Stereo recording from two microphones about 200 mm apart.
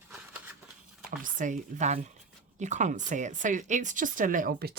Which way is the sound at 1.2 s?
40° right (ahead or behind).